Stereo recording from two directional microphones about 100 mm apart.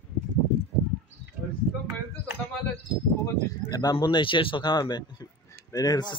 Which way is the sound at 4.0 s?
55° left (ahead or behind).